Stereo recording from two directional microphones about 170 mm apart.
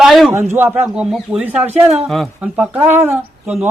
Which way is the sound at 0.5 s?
10° right (ahead or behind).